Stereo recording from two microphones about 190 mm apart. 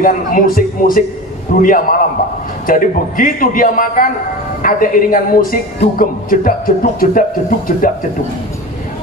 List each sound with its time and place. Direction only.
0.0 s speech: 45° left (ahead or behind)